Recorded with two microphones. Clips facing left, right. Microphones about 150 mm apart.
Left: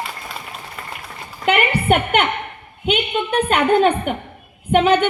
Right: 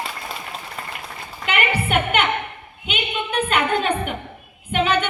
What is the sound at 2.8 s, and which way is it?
A woman's voice, 40° left (ahead or behind).